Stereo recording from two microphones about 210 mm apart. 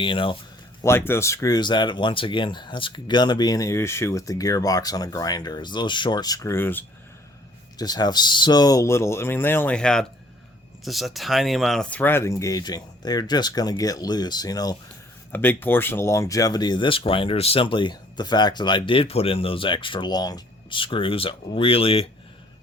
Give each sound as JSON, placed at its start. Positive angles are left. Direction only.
{"t": 0.0, "sound": "speech", "side_deg": 25}
{"t": 0.8, "sound": "speech", "side_deg": 10}